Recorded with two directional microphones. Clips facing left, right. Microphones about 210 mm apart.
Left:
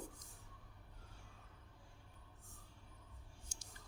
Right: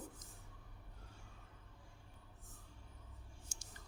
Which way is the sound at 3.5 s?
50° right (ahead or behind).